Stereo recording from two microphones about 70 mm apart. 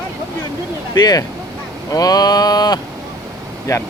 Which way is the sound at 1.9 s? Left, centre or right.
Left.